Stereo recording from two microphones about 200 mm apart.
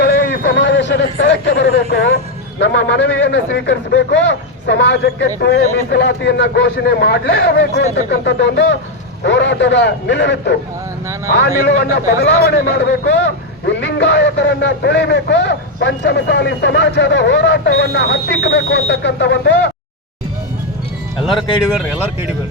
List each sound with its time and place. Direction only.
0.0 s a sound: 60° left (ahead or behind)
2.6 s a man's voice: 60° left (ahead or behind)
21.2 s speech: centre (ahead or behind)